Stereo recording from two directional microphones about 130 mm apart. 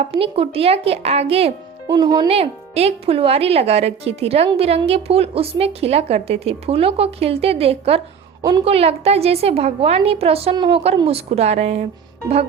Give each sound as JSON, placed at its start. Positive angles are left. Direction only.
{"t": 0.1, "sound": "speech", "side_deg": -45}
{"t": 1.9, "sound": "speech", "side_deg": -30}
{"t": 2.2, "sound": "speech", "side_deg": -50}
{"t": 8.4, "sound": "a woman's voice", "side_deg": -25}
{"t": 8.6, "sound": "speech", "side_deg": -50}